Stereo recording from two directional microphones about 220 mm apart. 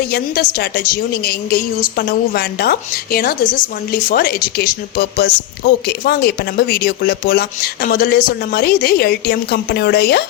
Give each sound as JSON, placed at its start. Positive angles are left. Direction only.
{"t": 0.1, "sound": "speech", "side_deg": 45}